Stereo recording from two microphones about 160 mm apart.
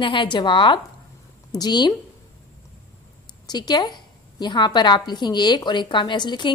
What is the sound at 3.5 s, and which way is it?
A woman's voice, 25° left (ahead or behind).